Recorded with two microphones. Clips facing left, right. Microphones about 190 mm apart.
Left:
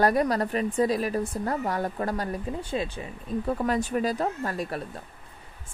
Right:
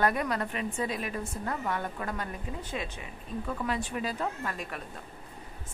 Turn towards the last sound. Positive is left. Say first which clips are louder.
# left 6 dB
turn(degrees=35)  # may be behind; listen again after turning